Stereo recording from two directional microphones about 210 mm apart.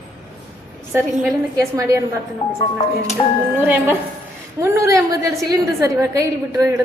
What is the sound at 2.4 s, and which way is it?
Speech, 25° left (ahead or behind).